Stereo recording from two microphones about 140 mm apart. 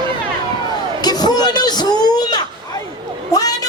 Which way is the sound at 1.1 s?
30° left (ahead or behind).